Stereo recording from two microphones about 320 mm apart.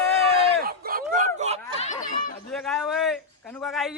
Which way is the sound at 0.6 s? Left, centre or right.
Right.